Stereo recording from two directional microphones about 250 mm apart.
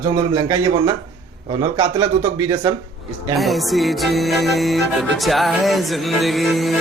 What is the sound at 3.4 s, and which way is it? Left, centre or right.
Music, centre.